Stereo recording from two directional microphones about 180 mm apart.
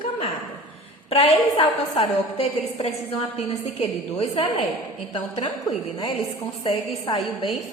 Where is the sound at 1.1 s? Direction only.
35° left (ahead or behind).